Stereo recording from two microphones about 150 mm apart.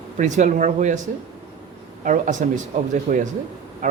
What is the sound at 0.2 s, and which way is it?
Speech, 55° right (ahead or behind).